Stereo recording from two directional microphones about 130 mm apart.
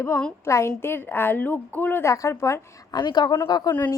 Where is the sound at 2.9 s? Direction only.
35° left (ahead or behind).